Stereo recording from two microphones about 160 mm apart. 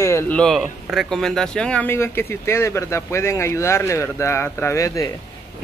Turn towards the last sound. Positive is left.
turn(degrees=20)  # may be behind; listen again after turning